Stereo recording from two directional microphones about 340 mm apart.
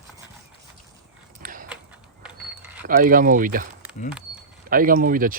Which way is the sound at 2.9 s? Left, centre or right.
Right.